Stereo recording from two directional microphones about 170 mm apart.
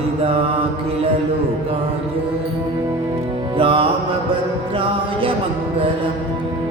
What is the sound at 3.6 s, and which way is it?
Music, 30° right (ahead or behind).